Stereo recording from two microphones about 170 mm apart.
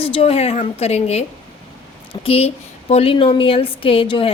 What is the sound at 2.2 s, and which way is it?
A woman's voice, 35° left (ahead or behind).